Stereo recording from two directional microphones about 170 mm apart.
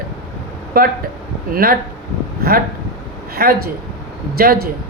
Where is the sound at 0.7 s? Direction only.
60° right (ahead or behind).